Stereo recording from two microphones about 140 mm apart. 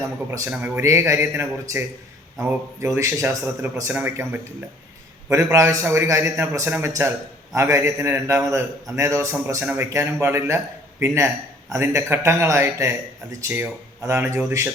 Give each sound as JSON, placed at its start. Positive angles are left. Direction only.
{"t": 0.3, "sound": "a man's voice", "side_deg": -20}